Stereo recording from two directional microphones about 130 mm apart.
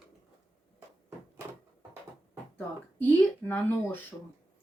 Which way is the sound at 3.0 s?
15° left (ahead or behind).